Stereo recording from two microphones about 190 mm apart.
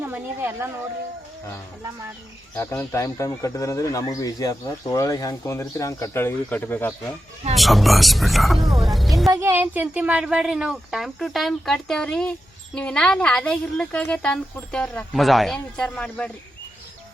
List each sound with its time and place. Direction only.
0.0 s speech: 10° right (ahead or behind)
2.6 s speech: 15° left (ahead or behind)
7.5 s a woman's voice: centre (ahead or behind)
9.3 s a woman's voice: 15° right (ahead or behind); by 16.3 s 5° left (ahead or behind)